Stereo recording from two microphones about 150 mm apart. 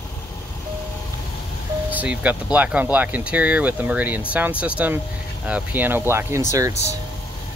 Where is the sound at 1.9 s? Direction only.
10° right (ahead or behind).